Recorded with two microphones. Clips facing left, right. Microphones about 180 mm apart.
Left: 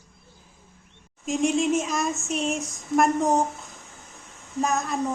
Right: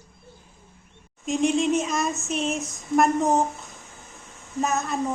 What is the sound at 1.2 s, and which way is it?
Child singing, centre (ahead or behind).